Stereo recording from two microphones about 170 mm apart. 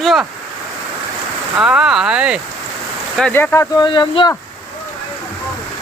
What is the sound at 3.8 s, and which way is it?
Speech, 25° left (ahead or behind).